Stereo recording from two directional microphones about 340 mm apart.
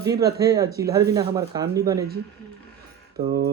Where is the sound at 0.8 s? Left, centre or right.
Centre.